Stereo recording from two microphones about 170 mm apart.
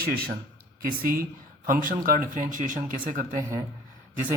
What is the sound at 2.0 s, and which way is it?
Speech, 55° right (ahead or behind).